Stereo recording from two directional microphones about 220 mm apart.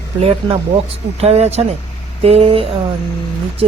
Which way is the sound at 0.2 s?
25° right (ahead or behind).